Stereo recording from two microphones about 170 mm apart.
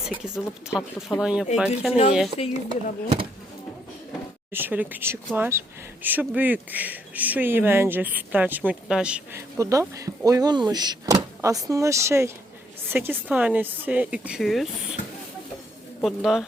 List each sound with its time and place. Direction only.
0.0 s speech: 5° right (ahead or behind)
2.5 s speech: 30° right (ahead or behind)
4.5 s speech: 10° right (ahead or behind)
9.6 s speech: 20° right (ahead or behind); by 14.7 s centre (ahead or behind)
16.0 s speech: centre (ahead or behind)